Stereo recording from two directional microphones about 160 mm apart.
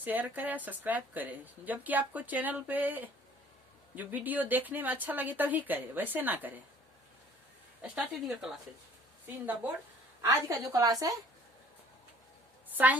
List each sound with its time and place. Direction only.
0.0 s speech: 10° right (ahead or behind)
7.8 s speech: 5° right (ahead or behind)
10.2 s a woman's voice: 20° right (ahead or behind)
12.7 s a woman's voice: 10° right (ahead or behind)